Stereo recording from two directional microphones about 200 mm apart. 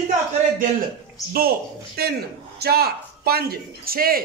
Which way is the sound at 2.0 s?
50° right (ahead or behind).